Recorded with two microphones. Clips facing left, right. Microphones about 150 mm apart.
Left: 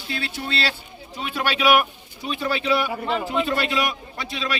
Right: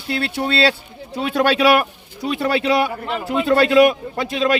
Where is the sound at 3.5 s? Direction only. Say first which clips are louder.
Right 11 dB; 65° right (ahead or behind); by 4.6 s 50° right (ahead or behind).